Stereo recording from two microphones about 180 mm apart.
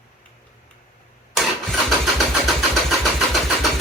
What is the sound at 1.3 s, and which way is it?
Engine starting, centre (ahead or behind).